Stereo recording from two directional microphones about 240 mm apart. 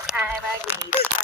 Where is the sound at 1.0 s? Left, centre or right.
Left.